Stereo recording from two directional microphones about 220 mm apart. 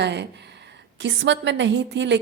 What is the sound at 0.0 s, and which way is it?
A woman's voice, 50° right (ahead or behind).